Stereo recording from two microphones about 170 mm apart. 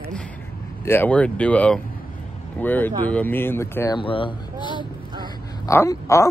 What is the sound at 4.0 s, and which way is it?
Speech, 30° left (ahead or behind).